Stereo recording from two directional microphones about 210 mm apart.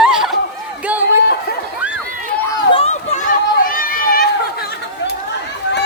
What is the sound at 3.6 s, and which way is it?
Run, 45° left (ahead or behind).